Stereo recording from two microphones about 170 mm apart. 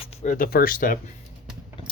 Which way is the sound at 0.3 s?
55° left (ahead or behind).